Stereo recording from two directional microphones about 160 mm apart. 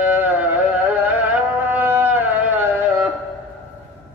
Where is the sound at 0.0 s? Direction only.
10° right (ahead or behind).